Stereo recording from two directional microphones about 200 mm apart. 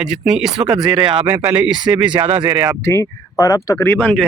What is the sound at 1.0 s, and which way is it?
Speech, 25° right (ahead or behind).